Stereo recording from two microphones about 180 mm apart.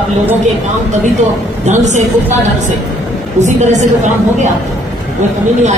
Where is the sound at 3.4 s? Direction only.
40° right (ahead or behind).